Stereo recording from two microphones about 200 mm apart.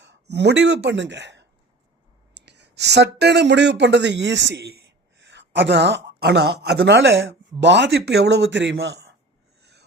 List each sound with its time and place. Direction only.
0.0 s a woman's voice: 60° right (ahead or behind)
9.6 s snort: 55° right (ahead or behind)